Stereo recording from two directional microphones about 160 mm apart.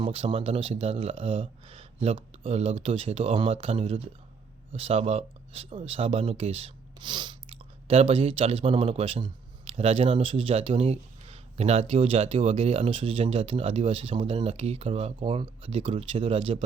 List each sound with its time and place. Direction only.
0.0 s speech: 35° right (ahead or behind)